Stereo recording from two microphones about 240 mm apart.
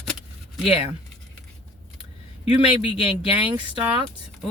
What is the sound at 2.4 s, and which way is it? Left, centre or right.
Speech, left.